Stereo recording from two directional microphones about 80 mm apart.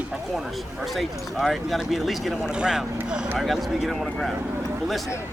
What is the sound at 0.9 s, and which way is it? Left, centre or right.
Speech, centre.